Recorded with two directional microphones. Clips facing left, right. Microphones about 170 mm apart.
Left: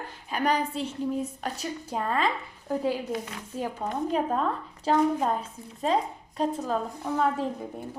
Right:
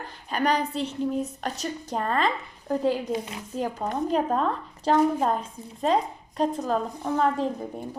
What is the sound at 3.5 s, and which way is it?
Speech, centre (ahead or behind).